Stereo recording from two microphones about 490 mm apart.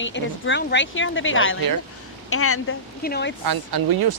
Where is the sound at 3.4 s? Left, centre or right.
Right.